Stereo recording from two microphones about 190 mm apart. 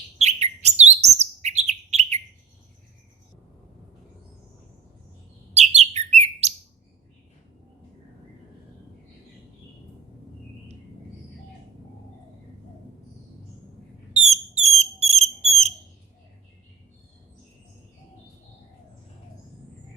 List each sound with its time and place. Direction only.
0.2 s chirp: 35° right (ahead or behind)
5.5 s bird: 35° right (ahead or behind)
14.2 s a sound: 35° right (ahead or behind)
14.8 s smoke detector: 35° right (ahead or behind)